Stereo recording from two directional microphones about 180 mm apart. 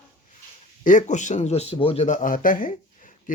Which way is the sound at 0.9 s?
45° left (ahead or behind).